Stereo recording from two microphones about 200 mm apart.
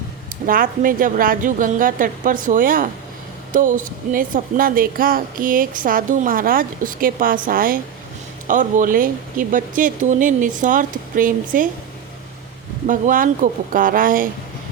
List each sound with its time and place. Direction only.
0.4 s speech: 45° right (ahead or behind)
12.9 s speech: 40° right (ahead or behind)